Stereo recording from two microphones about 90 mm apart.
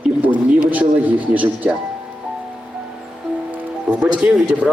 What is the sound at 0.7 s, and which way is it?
Speech, 20° right (ahead or behind).